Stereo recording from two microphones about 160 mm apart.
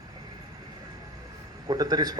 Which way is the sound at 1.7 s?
25° right (ahead or behind).